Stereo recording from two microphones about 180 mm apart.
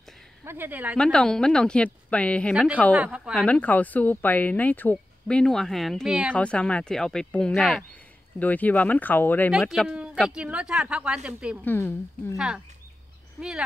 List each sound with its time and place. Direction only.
0.5 s speech: 10° right (ahead or behind)
0.9 s speech: 5° left (ahead or behind)
2.5 s speech: 5° right (ahead or behind)
3.4 s speech: 10° left (ahead or behind)
9.5 s speech: centre (ahead or behind)
11.6 s speech: 10° left (ahead or behind)
12.4 s speech: 5° right (ahead or behind)